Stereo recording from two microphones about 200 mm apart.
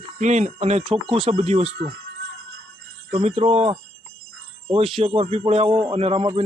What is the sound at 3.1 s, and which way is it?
A man's voice, 30° right (ahead or behind).